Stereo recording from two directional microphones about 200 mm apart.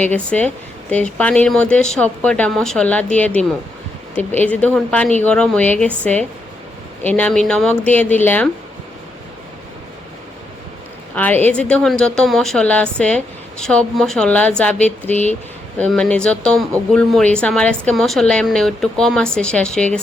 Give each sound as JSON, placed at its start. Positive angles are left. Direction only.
{"t": 0.3, "sound": "a woman's voice", "side_deg": 5}
{"t": 11.1, "sound": "a woman's voice", "side_deg": 10}
{"t": 15.1, "sound": "speech", "side_deg": 35}
{"t": 15.8, "sound": "a woman's voice", "side_deg": 5}